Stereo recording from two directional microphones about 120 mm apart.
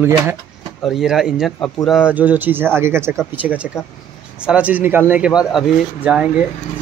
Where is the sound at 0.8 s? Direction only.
Centre (ahead or behind).